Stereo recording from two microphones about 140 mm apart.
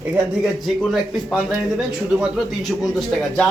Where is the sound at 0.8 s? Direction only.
Centre (ahead or behind).